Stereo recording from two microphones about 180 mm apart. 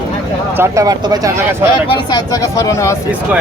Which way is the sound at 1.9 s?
25° left (ahead or behind).